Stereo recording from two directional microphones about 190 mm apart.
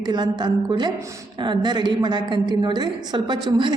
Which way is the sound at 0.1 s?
25° right (ahead or behind).